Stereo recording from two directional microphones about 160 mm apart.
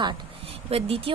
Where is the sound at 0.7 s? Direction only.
40° right (ahead or behind).